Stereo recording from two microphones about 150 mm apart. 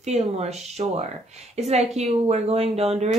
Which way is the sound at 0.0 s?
45° right (ahead or behind).